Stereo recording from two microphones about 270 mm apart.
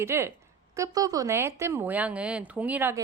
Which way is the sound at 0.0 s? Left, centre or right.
Centre.